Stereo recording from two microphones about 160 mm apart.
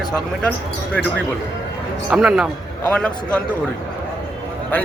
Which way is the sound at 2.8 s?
5° left (ahead or behind).